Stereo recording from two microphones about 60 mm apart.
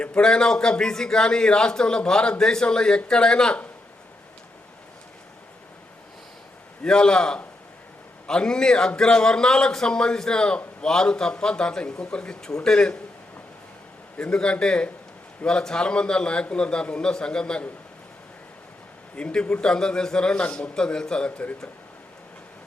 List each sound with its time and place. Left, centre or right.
0.0 s a man's voice: centre
6.8 s a man's voice: centre
14.2 s a man's voice: centre
19.1 s a man's voice: centre